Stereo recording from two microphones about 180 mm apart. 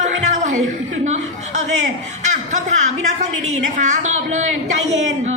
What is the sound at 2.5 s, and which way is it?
A woman's voice, 40° right (ahead or behind).